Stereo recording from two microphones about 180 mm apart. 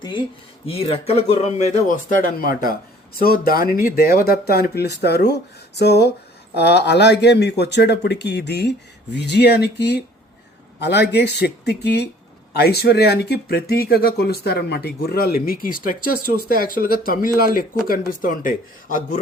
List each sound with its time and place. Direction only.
0.7 s speech: 30° left (ahead or behind)